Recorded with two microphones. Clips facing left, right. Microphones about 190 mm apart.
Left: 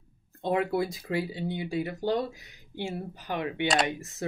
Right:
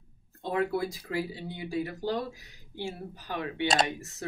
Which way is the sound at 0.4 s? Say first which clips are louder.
Left 2 dB; 20° left (ahead or behind).